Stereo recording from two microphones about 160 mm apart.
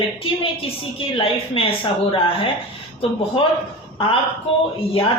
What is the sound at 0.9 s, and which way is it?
Speech, 35° left (ahead or behind).